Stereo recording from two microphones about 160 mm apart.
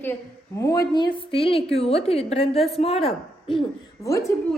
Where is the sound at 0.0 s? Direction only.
15° left (ahead or behind); by 3.6 s 35° left (ahead or behind).